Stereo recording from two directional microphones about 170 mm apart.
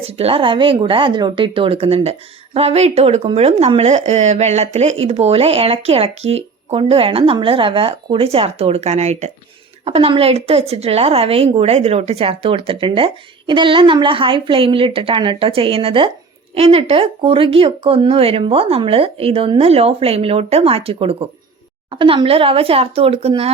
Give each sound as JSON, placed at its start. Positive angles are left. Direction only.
{"t": 0.0, "sound": "speech", "side_deg": -35}